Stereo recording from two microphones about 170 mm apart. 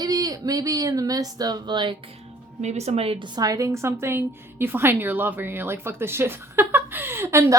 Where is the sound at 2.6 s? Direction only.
40° right (ahead or behind).